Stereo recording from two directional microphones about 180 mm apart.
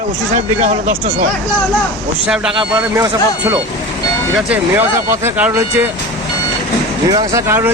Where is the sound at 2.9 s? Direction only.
15° right (ahead or behind).